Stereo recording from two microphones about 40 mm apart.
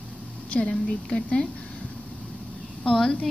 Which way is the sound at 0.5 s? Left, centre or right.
Left.